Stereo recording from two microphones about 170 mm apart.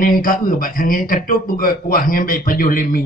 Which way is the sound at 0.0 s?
55° left (ahead or behind).